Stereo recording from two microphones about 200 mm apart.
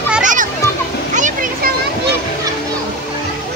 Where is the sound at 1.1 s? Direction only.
40° right (ahead or behind).